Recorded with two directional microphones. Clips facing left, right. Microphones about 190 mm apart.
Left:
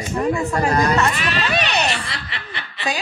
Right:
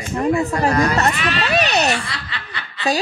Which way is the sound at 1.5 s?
40° right (ahead or behind).